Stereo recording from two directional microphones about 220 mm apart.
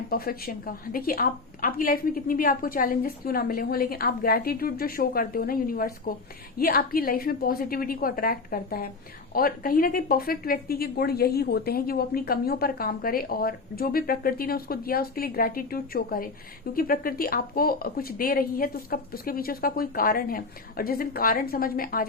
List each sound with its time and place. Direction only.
0.1 s a woman's voice: 45° left (ahead or behind)